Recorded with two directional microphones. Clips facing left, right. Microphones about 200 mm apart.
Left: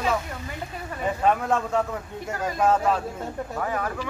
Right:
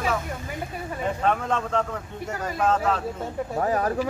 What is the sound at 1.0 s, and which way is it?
Speech, 5° left (ahead or behind).